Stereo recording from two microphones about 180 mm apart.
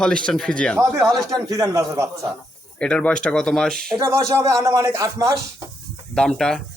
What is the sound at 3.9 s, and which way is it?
Speech, 15° right (ahead or behind).